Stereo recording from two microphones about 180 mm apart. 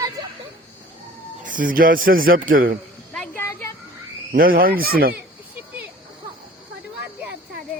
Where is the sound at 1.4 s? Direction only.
50° right (ahead or behind).